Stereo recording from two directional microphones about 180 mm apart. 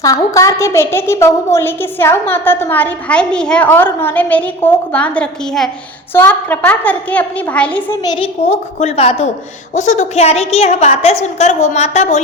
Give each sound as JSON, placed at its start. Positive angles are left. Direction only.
{"t": 0.0, "sound": "a woman's voice", "side_deg": 20}
{"t": 8.0, "sound": "a woman's voice", "side_deg": 25}